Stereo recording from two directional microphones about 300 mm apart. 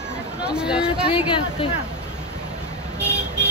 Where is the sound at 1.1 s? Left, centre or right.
Centre.